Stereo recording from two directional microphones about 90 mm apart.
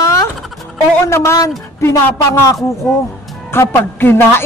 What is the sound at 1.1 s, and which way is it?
A man's voice, 30° left (ahead or behind).